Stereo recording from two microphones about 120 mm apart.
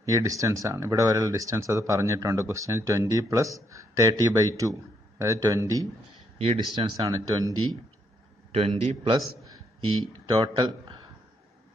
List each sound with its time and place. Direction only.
0.0 s speech: 25° right (ahead or behind)
6.3 s speech: 60° right (ahead or behind)
7.0 s speech: 35° right (ahead or behind)
8.5 s a man's voice: 60° right (ahead or behind)
9.8 s speech: 40° right (ahead or behind)